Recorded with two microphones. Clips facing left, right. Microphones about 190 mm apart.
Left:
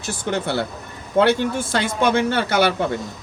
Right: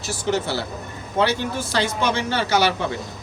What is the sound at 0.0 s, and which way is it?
Speech, 55° left (ahead or behind).